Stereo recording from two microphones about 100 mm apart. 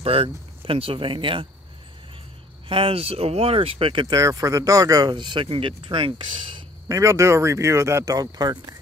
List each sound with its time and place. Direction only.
0.0 s speech: 65° right (ahead or behind)
2.7 s speech: 70° right (ahead or behind)
4.1 s speech: 35° right (ahead or behind); by 6.6 s 55° right (ahead or behind)
6.9 s speech: 30° right (ahead or behind)